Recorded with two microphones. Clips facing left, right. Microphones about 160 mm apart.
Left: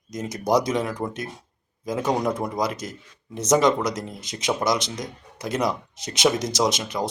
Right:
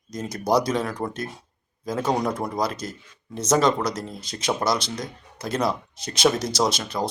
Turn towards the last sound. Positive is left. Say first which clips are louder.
# left 1 dB
turn(degrees=20)  # may be behind; listen again after turning